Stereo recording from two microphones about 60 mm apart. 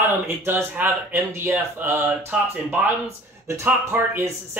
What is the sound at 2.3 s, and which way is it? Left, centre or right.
Speech, centre.